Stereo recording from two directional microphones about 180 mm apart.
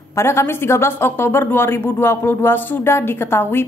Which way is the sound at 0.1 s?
15° left (ahead or behind).